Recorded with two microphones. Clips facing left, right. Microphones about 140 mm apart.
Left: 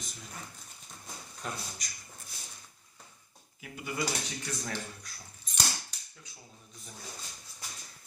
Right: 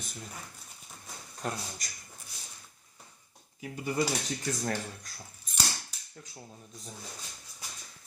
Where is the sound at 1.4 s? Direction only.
40° right (ahead or behind).